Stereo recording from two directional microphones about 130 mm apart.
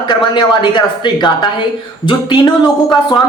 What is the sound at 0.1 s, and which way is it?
A woman's voice, 35° left (ahead or behind).